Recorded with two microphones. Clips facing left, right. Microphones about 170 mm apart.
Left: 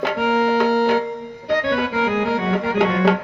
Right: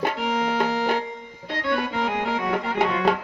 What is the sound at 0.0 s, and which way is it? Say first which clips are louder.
Music: left 5 dB; 65° left (ahead or behind).